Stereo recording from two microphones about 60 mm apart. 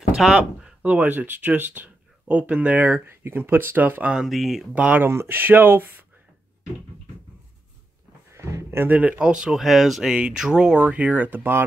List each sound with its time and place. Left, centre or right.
0.2 s speech: centre
0.8 s speech: right
2.9 s speech: right
4.3 s speech: centre
4.7 s speech: right
5.0 s speech: right
5.4 s speech: right
8.3 s a sound: right
8.6 s a sound: right
8.9 s speech: right
9.3 s speech: centre
9.6 s speech: centre
10.8 s speech: right